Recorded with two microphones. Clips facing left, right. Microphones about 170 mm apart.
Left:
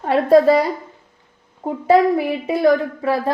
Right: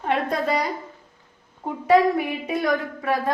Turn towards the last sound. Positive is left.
turn(degrees=30)  # may be behind; listen again after turning